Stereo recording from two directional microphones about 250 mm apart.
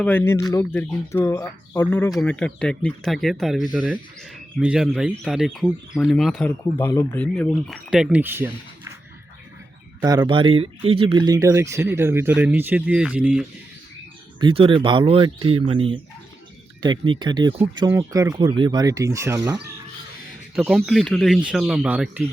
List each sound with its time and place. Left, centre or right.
0.0 s speech: centre
10.0 s speech: centre
14.3 s speech: centre
20.6 s speech: centre